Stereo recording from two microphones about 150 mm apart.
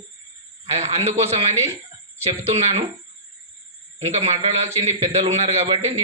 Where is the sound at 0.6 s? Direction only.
45° right (ahead or behind).